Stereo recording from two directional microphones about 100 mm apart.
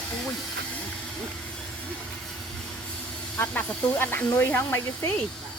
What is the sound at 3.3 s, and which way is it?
Speech, 20° left (ahead or behind).